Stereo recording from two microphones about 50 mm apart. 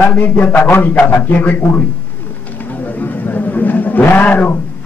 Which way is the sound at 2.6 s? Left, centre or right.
Left.